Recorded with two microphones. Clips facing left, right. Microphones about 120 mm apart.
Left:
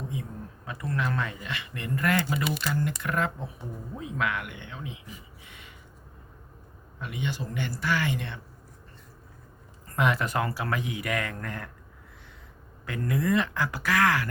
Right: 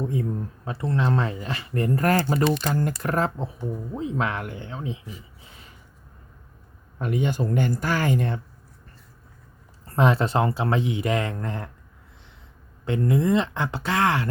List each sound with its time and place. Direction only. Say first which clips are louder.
0.6 s speech: right 5 dB; 30° right (ahead or behind)
5.4 s a sound: even; 35° right (ahead or behind)
7.0 s speech: right 9 dB; 45° right (ahead or behind)
9.8 s speech: right 5 dB; 30° right (ahead or behind)
12.8 s speech: right 6 dB; 25° right (ahead or behind)